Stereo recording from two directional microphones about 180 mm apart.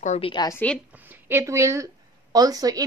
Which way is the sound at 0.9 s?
10° right (ahead or behind).